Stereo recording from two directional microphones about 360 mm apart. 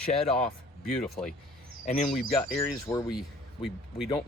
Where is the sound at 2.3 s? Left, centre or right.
Centre.